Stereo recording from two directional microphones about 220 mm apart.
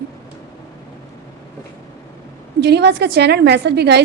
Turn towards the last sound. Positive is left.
turn(degrees=-50)  # may be behind; listen again after turning